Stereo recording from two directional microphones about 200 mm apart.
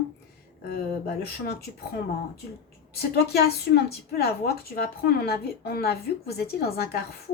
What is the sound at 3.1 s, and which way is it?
A woman's voice, 55° left (ahead or behind).